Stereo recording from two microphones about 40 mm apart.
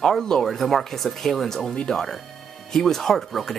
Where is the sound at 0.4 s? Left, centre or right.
Centre.